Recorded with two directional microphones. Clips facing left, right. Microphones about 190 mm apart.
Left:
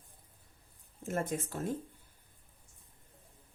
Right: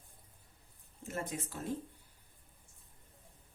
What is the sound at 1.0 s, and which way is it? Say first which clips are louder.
Speech: left 5 dB; 50° left (ahead or behind).